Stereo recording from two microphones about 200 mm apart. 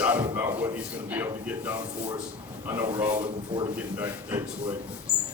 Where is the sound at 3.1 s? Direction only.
25° right (ahead or behind).